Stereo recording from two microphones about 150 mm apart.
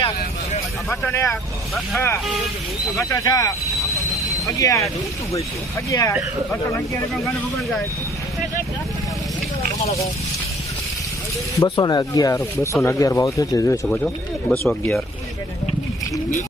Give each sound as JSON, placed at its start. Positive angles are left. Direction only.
{"t": 0.9, "sound": "speech", "side_deg": 15}
{"t": 5.9, "sound": "speech", "side_deg": 20}
{"t": 9.7, "sound": "speech", "side_deg": 45}
{"t": 11.6, "sound": "speech", "side_deg": 25}